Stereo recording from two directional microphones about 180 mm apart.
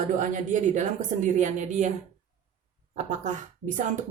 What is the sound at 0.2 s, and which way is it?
A woman's voice, 45° right (ahead or behind).